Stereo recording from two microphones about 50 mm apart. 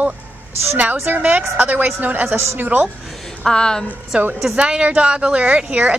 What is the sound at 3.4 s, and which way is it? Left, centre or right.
Speech, centre.